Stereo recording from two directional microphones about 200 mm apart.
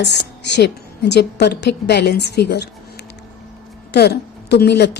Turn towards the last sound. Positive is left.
turn(degrees=55)  # may be behind; listen again after turning